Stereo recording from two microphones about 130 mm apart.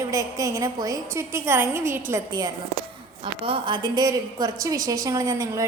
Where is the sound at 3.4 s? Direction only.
40° right (ahead or behind).